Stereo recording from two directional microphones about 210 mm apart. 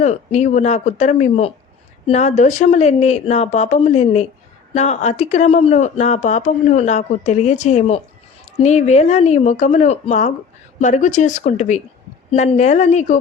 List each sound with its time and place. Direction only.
0.0 s speech: 35° left (ahead or behind)